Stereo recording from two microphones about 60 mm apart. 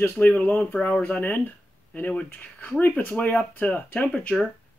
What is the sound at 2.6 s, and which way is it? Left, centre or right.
Speech, left.